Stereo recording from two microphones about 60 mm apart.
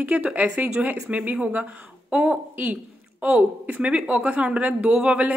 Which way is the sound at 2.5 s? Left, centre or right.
Right.